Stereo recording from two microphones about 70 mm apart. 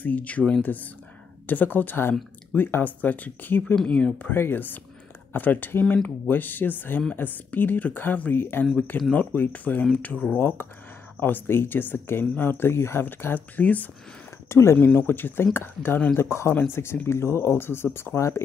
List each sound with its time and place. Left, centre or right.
0.0 s speech: left
3.7 s speech: centre
4.2 s speech: left
13.0 s speech: left
14.5 s speech: left
14.8 s speech: left
16.2 s speech: left